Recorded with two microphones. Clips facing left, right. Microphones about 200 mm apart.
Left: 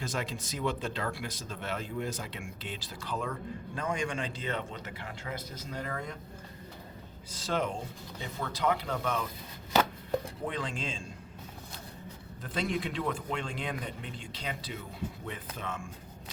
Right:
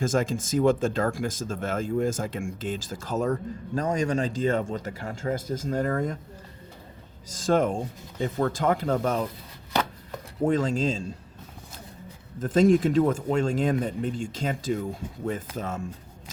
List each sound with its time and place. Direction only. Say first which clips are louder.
0.0 s speech: right 11 dB; 45° right (ahead or behind)
7.3 s speech: right 9 dB; 45° right (ahead or behind)
10.4 s speech: right 12 dB; 45° right (ahead or behind)
12.4 s speech: right 14 dB; 45° right (ahead or behind)